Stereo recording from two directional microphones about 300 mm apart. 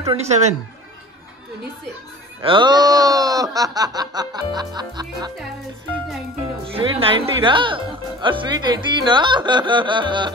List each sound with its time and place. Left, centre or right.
0.0 s speech: centre
2.4 s speech: centre
6.6 s speech: centre